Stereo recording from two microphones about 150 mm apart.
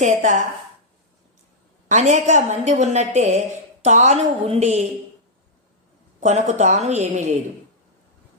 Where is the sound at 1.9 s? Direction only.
50° right (ahead or behind).